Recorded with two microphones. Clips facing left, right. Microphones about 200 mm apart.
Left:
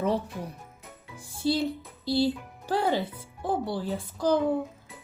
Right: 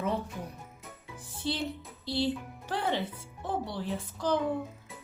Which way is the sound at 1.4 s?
35° left (ahead or behind).